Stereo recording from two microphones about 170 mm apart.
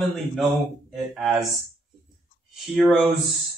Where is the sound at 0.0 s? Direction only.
Centre (ahead or behind).